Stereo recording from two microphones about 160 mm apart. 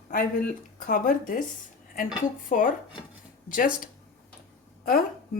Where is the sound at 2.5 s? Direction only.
55° left (ahead or behind).